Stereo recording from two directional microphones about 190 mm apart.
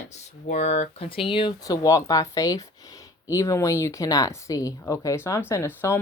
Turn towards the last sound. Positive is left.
turn(degrees=15)  # may be behind; listen again after turning